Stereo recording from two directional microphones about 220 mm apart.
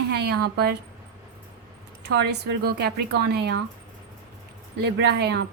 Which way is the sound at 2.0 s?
50° right (ahead or behind).